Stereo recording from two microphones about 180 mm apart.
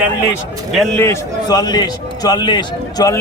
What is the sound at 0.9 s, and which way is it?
A man's voice, 15° left (ahead or behind).